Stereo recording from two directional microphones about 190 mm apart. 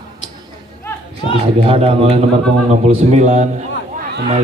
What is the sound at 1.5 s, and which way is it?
A man's voice, 30° right (ahead or behind).